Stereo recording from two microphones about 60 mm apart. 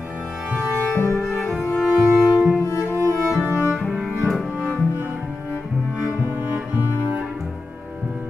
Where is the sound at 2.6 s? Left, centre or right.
Left.